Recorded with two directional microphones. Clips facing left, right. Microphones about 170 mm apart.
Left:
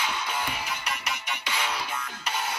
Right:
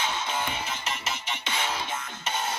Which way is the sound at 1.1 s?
25° right (ahead or behind).